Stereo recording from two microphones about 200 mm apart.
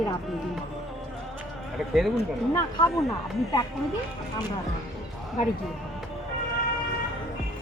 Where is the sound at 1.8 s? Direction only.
Centre (ahead or behind).